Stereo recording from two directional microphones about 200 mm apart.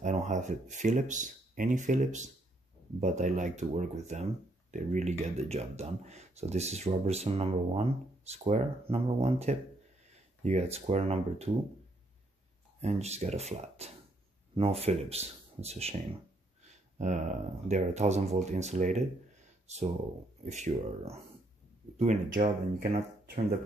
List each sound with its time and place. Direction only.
0.0 s speech: 35° right (ahead or behind)
12.8 s speech: 35° right (ahead or behind)
16.6 s a sound: 35° right (ahead or behind)
17.6 s speech: 35° right (ahead or behind)